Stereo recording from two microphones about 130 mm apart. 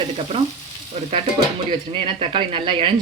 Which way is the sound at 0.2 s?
45° right (ahead or behind).